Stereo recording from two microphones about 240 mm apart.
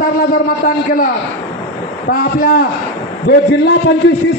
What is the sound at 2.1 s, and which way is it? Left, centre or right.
A man's voice, left.